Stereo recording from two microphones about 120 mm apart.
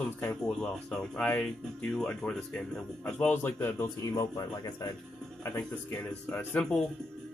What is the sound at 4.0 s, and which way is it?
Speech, 30° left (ahead or behind).